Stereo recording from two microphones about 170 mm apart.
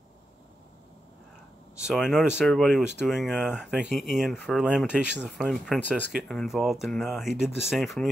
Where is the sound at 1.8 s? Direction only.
5° right (ahead or behind).